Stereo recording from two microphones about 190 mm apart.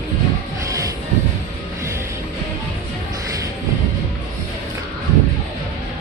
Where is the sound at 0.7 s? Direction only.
15° right (ahead or behind).